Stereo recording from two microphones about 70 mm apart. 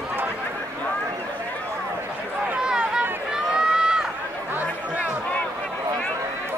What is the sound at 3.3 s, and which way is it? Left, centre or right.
Run, centre.